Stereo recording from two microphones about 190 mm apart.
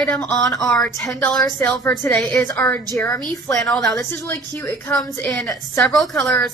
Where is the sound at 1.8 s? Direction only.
10° left (ahead or behind).